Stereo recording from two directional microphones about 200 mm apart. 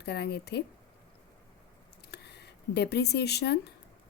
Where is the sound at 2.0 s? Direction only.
55° left (ahead or behind).